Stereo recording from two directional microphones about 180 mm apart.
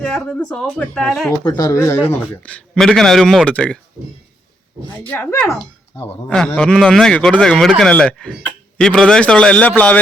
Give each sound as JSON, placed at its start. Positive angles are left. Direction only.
{"t": 0.0, "sound": "a man's voice", "side_deg": 5}
{"t": 1.5, "sound": "a man's voice", "side_deg": 20}
{"t": 5.1, "sound": "speech", "side_deg": 15}
{"t": 6.2, "sound": "a man's voice", "side_deg": 5}